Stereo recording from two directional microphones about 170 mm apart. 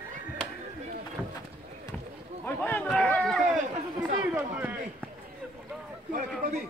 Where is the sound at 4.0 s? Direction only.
10° right (ahead or behind).